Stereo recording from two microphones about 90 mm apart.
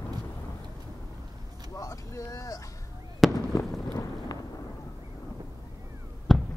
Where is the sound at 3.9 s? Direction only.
40° left (ahead or behind).